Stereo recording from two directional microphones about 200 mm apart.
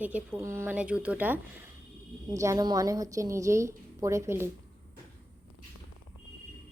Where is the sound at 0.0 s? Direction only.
10° right (ahead or behind).